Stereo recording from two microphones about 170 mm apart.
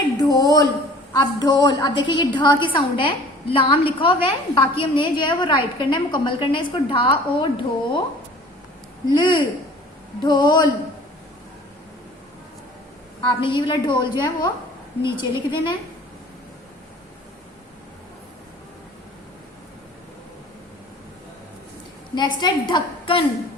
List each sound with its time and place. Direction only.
0.2 s a sound: 20° left (ahead or behind)
1.1 s a woman's voice: 25° left (ahead or behind)
9.0 s a woman's voice: 25° left (ahead or behind)
13.4 s a woman's voice: 30° left (ahead or behind)
22.1 s a woman's voice: 25° left (ahead or behind)